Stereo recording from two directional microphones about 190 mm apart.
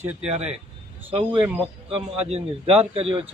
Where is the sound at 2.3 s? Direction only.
30° right (ahead or behind).